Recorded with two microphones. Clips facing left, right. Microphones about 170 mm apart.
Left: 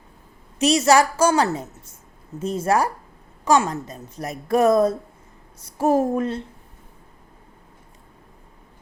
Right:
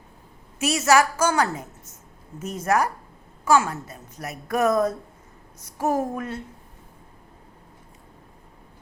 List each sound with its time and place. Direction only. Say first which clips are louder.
0.6 s speech: left 3 dB; 35° left (ahead or behind)